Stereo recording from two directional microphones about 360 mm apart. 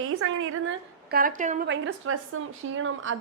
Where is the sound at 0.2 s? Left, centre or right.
Right.